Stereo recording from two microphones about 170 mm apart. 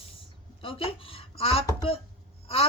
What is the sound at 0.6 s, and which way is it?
A woman's voice, 30° left (ahead or behind).